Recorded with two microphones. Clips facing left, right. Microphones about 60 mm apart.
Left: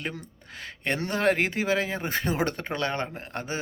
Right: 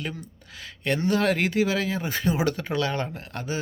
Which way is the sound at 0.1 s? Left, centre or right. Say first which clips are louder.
Right 1 dB; left.